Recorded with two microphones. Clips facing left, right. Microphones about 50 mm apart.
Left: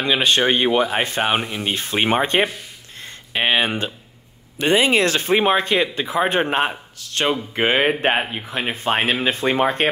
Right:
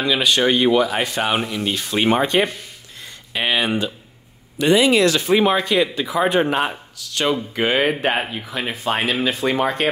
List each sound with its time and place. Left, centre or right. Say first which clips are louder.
0.0 s speech: even; left
3.0 s a sound: left 2 dB; left
4.6 s speech: right 2 dB; left